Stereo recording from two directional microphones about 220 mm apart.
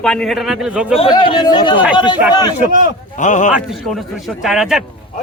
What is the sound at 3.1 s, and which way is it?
Speech, 35° left (ahead or behind).